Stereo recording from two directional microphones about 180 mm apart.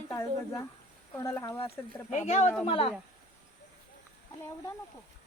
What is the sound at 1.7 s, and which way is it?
Speech, 40° left (ahead or behind).